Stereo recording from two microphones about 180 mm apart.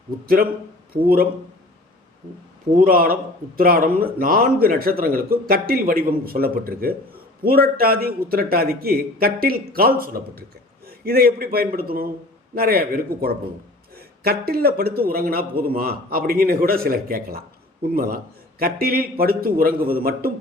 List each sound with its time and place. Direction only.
1.0 s a man's voice: 55° right (ahead or behind)
2.8 s a man's voice: 55° right (ahead or behind)